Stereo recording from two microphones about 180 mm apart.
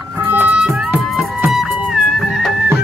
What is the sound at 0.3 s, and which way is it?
Music, 10° right (ahead or behind).